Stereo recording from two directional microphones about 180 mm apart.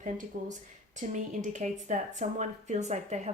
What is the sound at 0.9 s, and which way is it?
Speech, 40° right (ahead or behind).